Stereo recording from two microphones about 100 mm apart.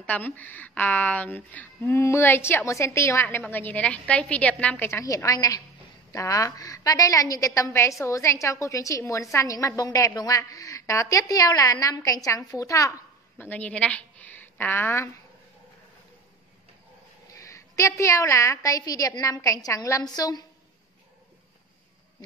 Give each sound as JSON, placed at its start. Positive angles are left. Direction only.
{"t": 0.0, "sound": "a woman's voice", "side_deg": 15}
{"t": 4.8, "sound": "a woman's voice", "side_deg": 30}
{"t": 13.4, "sound": "a woman's voice", "side_deg": 15}
{"t": 17.3, "sound": "a woman's voice", "side_deg": 30}